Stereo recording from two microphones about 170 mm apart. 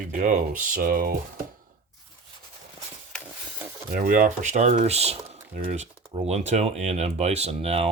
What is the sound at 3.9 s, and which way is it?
Speech, 55° right (ahead or behind).